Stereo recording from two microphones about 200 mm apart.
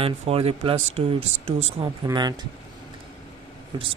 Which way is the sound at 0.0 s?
30° right (ahead or behind).